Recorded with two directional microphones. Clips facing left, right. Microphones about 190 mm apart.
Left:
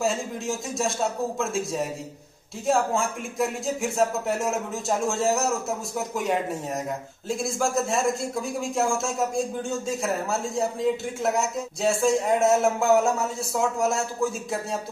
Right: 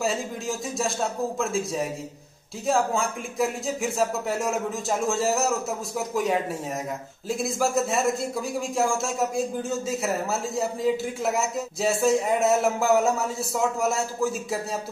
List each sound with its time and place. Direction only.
0.0 s speech: centre (ahead or behind)